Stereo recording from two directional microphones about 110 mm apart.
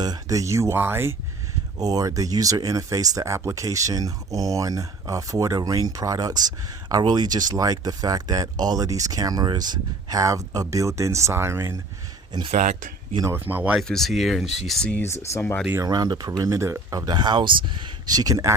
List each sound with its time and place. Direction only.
0.0 s speech: 35° right (ahead or behind)
1.8 s speech: 35° right (ahead or behind)
12.3 s speech: 40° right (ahead or behind)
13.3 s speech: 15° right (ahead or behind)
13.7 s speech: 5° left (ahead or behind)
14.9 s speech: 25° left (ahead or behind)
15.8 s speech: 40° right (ahead or behind)